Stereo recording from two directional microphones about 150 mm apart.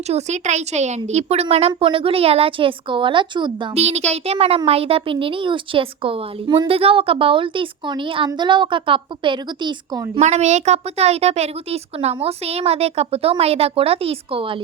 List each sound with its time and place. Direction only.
0.1 s a woman's voice: 50° right (ahead or behind); by 3.7 s 30° right (ahead or behind)
3.8 s a child's voice: 45° right (ahead or behind); by 10.1 s 30° right (ahead or behind)
10.2 s a woman's voice: 50° right (ahead or behind)